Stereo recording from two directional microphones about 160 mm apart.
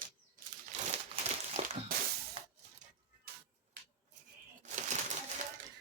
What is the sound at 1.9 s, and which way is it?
Music, 65° right (ahead or behind).